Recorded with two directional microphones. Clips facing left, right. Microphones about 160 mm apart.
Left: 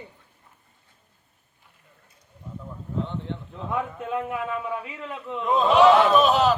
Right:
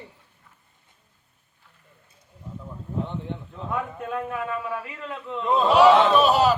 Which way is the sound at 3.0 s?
15° right (ahead or behind).